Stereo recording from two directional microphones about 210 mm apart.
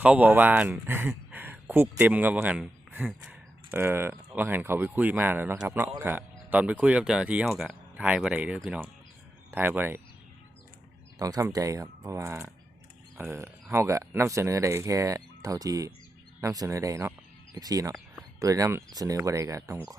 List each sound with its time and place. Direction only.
0.0 s speech: 5° right (ahead or behind)
11.2 s speech: 15° right (ahead or behind)